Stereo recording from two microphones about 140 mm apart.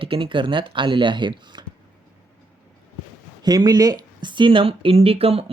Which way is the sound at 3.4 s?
30° right (ahead or behind).